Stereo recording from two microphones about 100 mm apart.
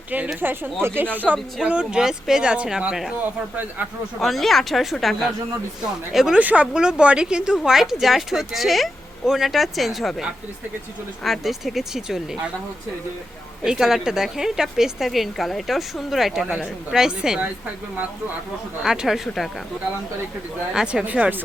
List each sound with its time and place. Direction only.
0.3 s speech: 20° right (ahead or behind)
4.2 s speech: centre (ahead or behind)
13.7 s speech: 5° right (ahead or behind)
18.8 s speech: 5° right (ahead or behind)
20.7 s speech: 10° right (ahead or behind)